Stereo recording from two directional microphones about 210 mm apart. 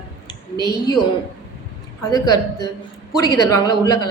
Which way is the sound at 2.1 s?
15° left (ahead or behind).